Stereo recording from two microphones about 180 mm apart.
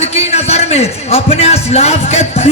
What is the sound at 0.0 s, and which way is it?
A man's voice, 35° left (ahead or behind).